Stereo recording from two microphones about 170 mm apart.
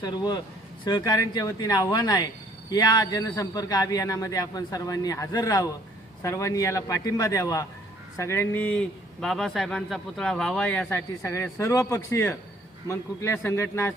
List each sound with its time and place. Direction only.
0.0 s a man's voice: 25° left (ahead or behind)